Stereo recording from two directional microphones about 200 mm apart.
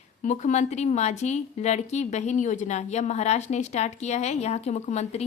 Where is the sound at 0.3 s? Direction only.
35° left (ahead or behind).